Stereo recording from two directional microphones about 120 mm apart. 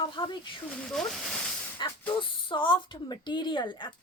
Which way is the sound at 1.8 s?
40° left (ahead or behind).